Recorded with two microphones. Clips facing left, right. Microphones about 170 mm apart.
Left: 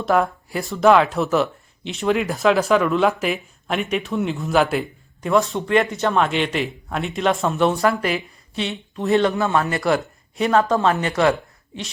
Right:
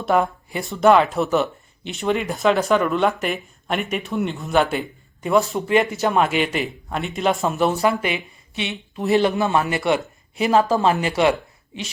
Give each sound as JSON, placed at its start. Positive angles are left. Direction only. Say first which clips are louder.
{"t": 0.0, "sound": "speech", "louder": "even", "side_deg": 0}
{"t": 9.2, "sound": "speech", "louder": "even", "side_deg": -20}
{"t": 9.7, "sound": "speech", "louder": "even", "side_deg": 0}